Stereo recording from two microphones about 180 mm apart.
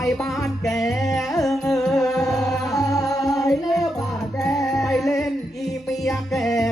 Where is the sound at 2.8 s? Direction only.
20° left (ahead or behind).